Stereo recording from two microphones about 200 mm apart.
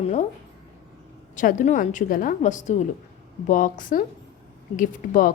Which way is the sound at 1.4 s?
40° left (ahead or behind).